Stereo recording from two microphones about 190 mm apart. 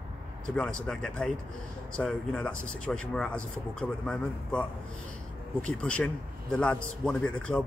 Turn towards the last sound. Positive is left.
turn(degrees=5)  # may be behind; listen again after turning